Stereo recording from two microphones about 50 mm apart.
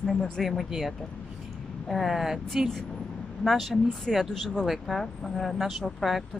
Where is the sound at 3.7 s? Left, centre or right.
Centre.